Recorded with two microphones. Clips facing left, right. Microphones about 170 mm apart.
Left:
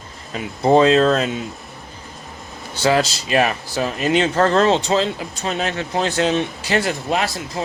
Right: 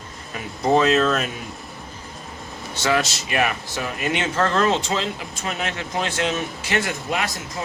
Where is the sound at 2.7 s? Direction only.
30° left (ahead or behind).